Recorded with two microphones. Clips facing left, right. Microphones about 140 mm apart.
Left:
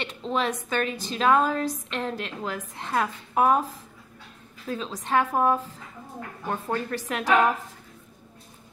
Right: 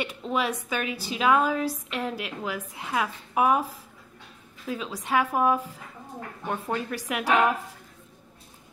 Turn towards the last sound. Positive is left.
turn(degrees=-10)  # may be behind; listen again after turning